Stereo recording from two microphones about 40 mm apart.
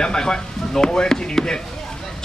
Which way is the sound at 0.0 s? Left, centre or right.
Centre.